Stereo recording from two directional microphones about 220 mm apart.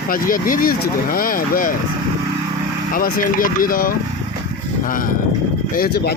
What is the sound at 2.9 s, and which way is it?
Speech, 40° left (ahead or behind).